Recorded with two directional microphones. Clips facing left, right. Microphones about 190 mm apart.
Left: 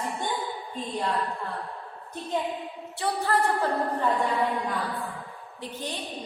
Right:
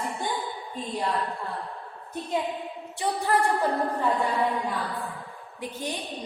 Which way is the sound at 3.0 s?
15° right (ahead or behind).